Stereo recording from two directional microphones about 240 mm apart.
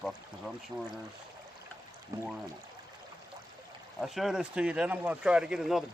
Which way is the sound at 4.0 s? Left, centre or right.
Centre.